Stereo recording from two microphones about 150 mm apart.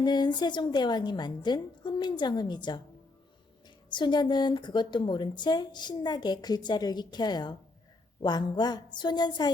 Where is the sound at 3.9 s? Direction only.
30° left (ahead or behind).